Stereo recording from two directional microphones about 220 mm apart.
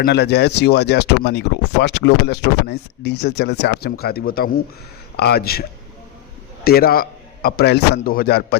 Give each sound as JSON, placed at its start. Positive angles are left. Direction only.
{"t": 0.0, "sound": "speech", "side_deg": 50}
{"t": 6.7, "sound": "speech", "side_deg": 45}